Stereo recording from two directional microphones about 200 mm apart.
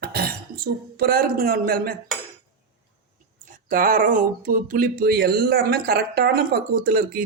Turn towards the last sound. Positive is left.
turn(degrees=-45)  # may be behind; listen again after turning